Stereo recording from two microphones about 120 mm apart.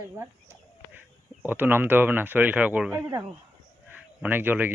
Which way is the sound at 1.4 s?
15° right (ahead or behind).